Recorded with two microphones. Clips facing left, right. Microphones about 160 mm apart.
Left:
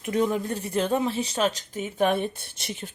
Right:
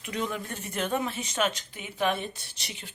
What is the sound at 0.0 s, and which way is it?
A woman's voice, 45° left (ahead or behind).